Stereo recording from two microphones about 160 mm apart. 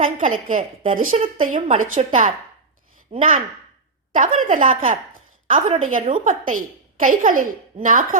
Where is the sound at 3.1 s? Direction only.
35° right (ahead or behind).